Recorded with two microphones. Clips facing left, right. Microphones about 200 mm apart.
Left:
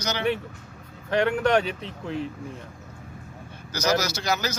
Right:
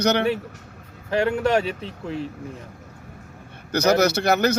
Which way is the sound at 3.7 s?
60° right (ahead or behind).